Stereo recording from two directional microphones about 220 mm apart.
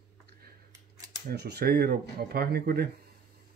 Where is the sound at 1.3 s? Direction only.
45° right (ahead or behind).